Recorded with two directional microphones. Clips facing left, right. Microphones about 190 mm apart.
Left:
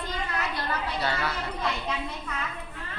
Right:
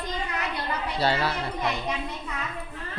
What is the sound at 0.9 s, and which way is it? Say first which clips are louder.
Speech: right 4 dB; 30° right (ahead or behind).